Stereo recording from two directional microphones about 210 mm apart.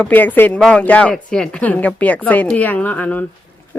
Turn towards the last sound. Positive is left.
turn(degrees=10)  # may be behind; listen again after turning